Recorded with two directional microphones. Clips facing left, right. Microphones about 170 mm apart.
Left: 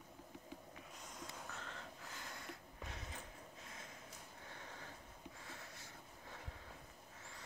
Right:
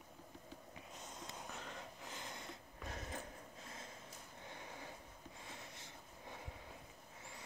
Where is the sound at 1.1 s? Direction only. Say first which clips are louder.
Even; 20° right (ahead or behind).